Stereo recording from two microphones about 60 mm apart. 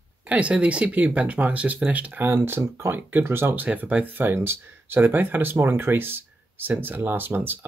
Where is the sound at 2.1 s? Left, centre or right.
Right.